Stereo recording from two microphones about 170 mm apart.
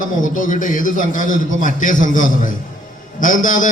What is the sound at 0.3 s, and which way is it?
A man's voice, 50° left (ahead or behind).